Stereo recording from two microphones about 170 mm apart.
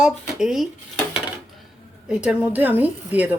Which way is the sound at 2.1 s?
5° right (ahead or behind).